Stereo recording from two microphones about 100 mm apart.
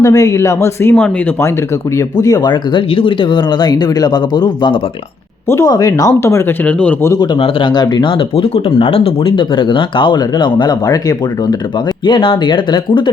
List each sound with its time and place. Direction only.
0.0 s speech: 30° left (ahead or behind)
2.0 s speech: 35° left (ahead or behind)
2.5 s speech: 60° left (ahead or behind)
5.5 s speech: 30° left (ahead or behind)
6.1 s speech: 25° left (ahead or behind)
6.7 s a man's voice: 10° left (ahead or behind)
7.2 s speech: 55° left (ahead or behind)
8.4 s speech: 80° left; by 10.9 s 45° left (ahead or behind)
12.0 s speech: 55° left (ahead or behind)